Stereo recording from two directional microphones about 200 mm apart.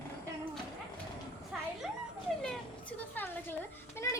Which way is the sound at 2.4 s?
5° left (ahead or behind).